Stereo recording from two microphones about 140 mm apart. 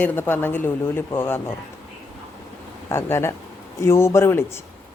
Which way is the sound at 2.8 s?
20° left (ahead or behind).